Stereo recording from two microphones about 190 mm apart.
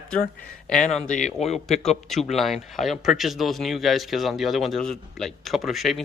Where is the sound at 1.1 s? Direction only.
35° left (ahead or behind).